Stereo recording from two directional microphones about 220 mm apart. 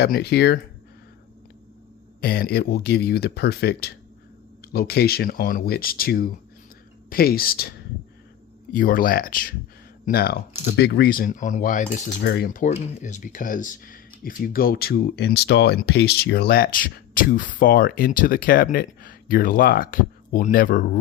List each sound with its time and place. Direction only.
0.0 s speech: 45° left (ahead or behind)
2.2 s speech: 45° left (ahead or behind)
8.7 s speech: 40° left (ahead or behind)